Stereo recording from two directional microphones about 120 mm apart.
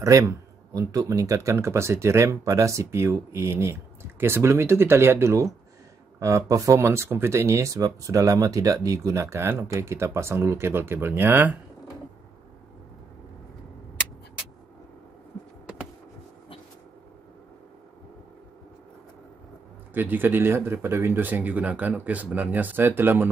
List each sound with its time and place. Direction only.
0.0 s speech: 25° right (ahead or behind)
19.9 s speech: 15° right (ahead or behind)